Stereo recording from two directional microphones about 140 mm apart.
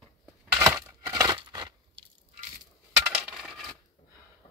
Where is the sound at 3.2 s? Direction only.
5° right (ahead or behind).